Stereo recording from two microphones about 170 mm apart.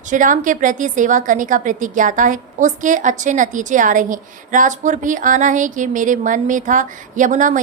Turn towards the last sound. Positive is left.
turn(degrees=-50)  # may be behind; listen again after turning